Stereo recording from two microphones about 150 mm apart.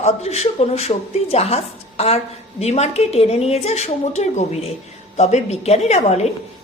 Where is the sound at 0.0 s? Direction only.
45° left (ahead or behind).